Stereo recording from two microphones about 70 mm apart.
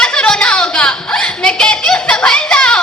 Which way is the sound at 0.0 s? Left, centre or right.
Centre.